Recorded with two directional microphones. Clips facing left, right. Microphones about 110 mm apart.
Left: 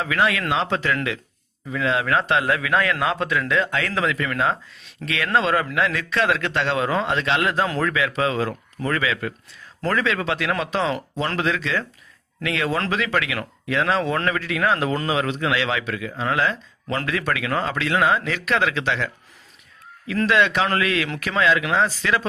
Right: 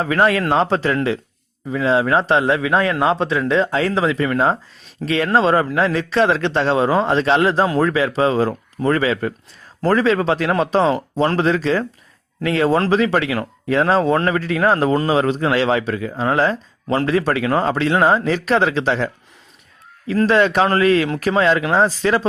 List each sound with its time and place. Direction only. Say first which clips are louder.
0.0 s a man's voice: right 5 dB; 40° right (ahead or behind)